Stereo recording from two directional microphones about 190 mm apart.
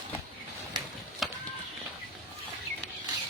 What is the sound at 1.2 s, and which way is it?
Run, centre (ahead or behind).